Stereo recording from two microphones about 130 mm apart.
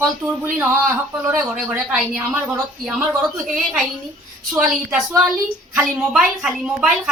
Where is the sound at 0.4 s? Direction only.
20° right (ahead or behind).